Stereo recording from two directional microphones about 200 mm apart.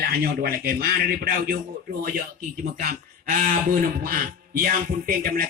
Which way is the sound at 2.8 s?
45° right (ahead or behind).